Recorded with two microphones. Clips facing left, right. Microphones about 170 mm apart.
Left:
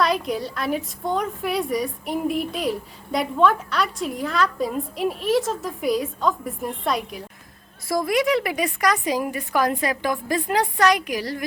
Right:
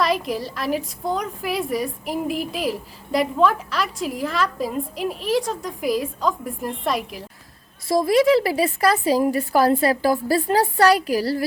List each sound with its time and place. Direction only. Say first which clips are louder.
0.0 s a woman's voice: even; centre (ahead or behind)
7.9 s a woman's voice: right 5 dB; 25° right (ahead or behind)